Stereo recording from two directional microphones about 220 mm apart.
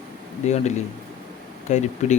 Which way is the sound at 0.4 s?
30° left (ahead or behind).